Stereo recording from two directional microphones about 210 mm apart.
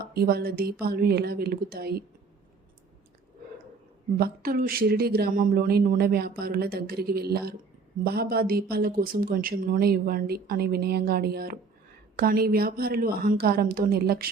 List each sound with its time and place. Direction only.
0.0 s speech: 45° right (ahead or behind)
4.2 s speech: 45° right (ahead or behind)